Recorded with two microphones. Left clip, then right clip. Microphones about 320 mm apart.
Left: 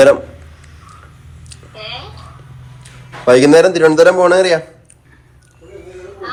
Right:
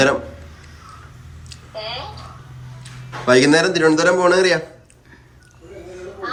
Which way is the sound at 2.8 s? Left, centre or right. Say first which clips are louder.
Left 8 dB; centre.